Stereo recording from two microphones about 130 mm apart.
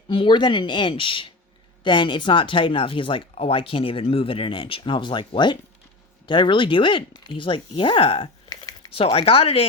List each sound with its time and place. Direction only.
0.1 s speech: 40° left (ahead or behind)
8.4 s a sound: 25° left (ahead or behind)
8.9 s speech: 45° left (ahead or behind)